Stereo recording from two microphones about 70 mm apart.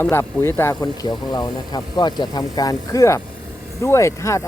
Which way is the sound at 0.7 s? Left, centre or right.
Left.